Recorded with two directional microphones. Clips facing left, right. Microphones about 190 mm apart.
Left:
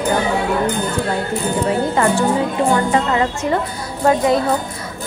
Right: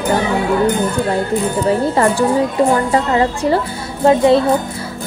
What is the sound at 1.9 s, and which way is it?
Speech, 35° right (ahead or behind).